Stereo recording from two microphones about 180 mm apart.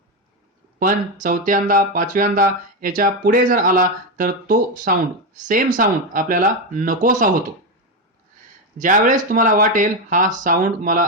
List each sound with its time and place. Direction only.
1.2 s speech: 50° right (ahead or behind)
8.8 s speech: 45° right (ahead or behind)